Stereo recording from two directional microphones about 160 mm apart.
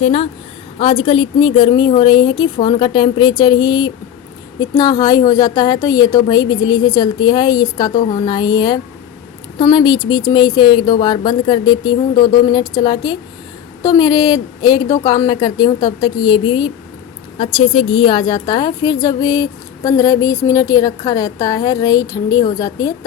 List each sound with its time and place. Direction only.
0.0 s a woman's voice: 35° left (ahead or behind)